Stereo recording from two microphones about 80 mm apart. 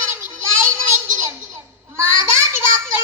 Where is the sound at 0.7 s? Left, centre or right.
Right.